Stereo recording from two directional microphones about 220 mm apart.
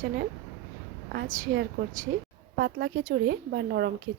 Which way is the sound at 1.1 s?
45° right (ahead or behind).